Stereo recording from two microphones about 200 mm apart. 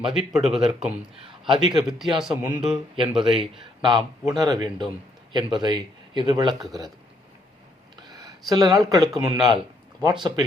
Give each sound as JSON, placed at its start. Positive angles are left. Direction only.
{"t": 0.0, "sound": "speech", "side_deg": 0}
{"t": 1.5, "sound": "speech", "side_deg": -20}
{"t": 1.9, "sound": "speech", "side_deg": 0}
{"t": 3.8, "sound": "speech", "side_deg": -25}
{"t": 8.2, "sound": "speech", "side_deg": -20}